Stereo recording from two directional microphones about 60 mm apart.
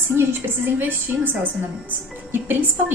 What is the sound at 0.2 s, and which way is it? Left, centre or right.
A woman's voice, right.